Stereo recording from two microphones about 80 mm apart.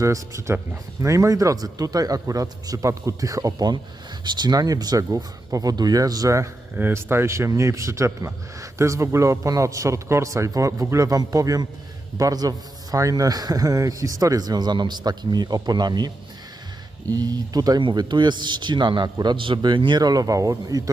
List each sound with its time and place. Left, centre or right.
0.0 s a man's voice: right
4.2 s a man's voice: right
6.7 s a man's voice: right
17.7 s a man's voice: right